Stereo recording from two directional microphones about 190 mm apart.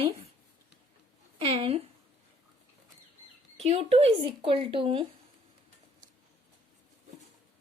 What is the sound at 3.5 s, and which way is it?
Speech, 30° right (ahead or behind).